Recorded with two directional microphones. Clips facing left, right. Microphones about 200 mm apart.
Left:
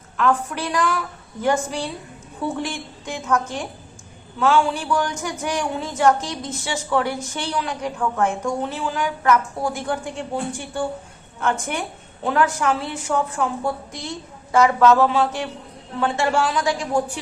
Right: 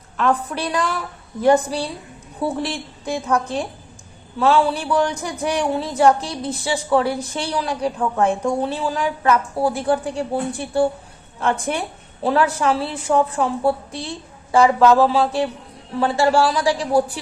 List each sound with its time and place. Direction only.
0.2 s speech: 35° right (ahead or behind)